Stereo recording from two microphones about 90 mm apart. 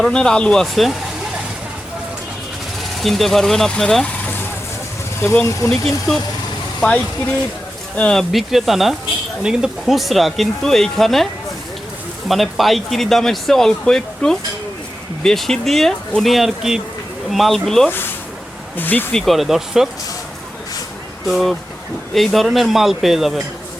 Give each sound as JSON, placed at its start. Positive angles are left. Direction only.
{"t": 0.0, "sound": "speech", "side_deg": 10}
{"t": 3.0, "sound": "speech", "side_deg": 0}
{"t": 5.2, "sound": "speech", "side_deg": 20}
{"t": 5.6, "sound": "speech", "side_deg": 5}
{"t": 7.9, "sound": "speech", "side_deg": 10}
{"t": 12.3, "sound": "speech", "side_deg": 0}
{"t": 18.8, "sound": "speech", "side_deg": 20}
{"t": 19.1, "sound": "speech", "side_deg": 0}
{"t": 21.2, "sound": "speech", "side_deg": 0}